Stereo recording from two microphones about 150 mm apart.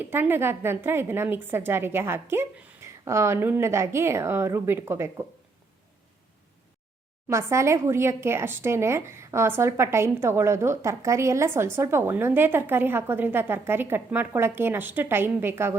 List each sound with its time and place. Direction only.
0.0 s speech: 15° right (ahead or behind)
7.3 s speech: 20° right (ahead or behind)